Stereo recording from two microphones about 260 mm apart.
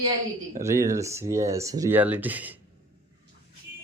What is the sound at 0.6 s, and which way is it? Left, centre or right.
Speech, centre.